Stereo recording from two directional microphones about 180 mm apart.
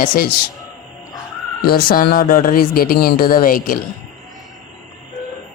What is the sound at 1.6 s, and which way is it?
Speech, 55° left (ahead or behind).